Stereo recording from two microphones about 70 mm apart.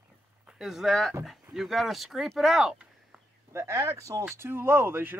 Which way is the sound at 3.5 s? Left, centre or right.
Right.